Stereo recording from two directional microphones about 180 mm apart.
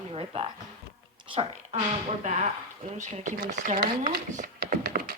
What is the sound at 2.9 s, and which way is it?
Speech, 40° right (ahead or behind).